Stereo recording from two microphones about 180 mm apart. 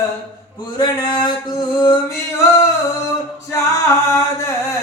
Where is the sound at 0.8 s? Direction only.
25° left (ahead or behind).